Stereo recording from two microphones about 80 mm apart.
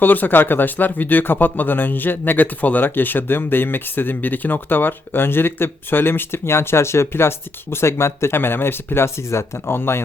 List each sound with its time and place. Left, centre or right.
0.0 s speech: left